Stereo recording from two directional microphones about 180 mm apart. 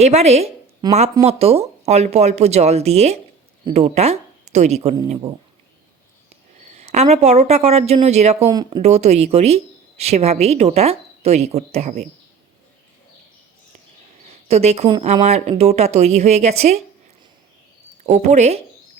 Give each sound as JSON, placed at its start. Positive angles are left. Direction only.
{"t": 0.0, "sound": "speech", "side_deg": -35}
{"t": 0.8, "sound": "speech", "side_deg": -20}
{"t": 1.2, "sound": "speech", "side_deg": -35}
{"t": 6.7, "sound": "speech", "side_deg": -35}
{"t": 14.3, "sound": "a sound", "side_deg": -35}
{"t": 15.0, "sound": "speech", "side_deg": -40}
{"t": 18.0, "sound": "speech", "side_deg": -40}